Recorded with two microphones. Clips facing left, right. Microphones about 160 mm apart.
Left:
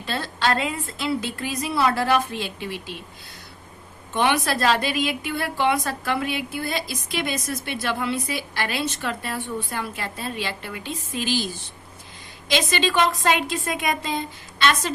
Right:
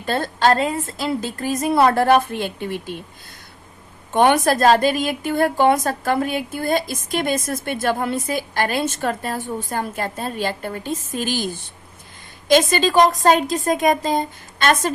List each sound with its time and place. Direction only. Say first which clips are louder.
0.0 s a woman's voice: right 6 dB; 50° right (ahead or behind)
4.1 s a woman's voice: right 6 dB; 45° right (ahead or behind)